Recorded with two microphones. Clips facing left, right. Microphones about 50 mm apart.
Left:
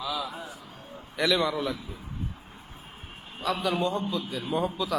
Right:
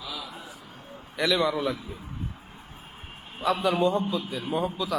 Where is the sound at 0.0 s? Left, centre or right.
Left.